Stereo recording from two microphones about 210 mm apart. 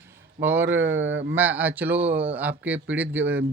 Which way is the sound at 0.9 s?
65° right (ahead or behind).